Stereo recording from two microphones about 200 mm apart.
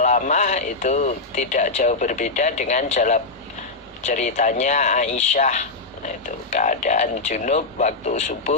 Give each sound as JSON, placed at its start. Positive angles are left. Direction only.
{"t": 0.0, "sound": "speech", "side_deg": 35}